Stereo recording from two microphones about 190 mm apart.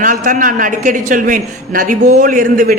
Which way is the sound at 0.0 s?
45° right (ahead or behind).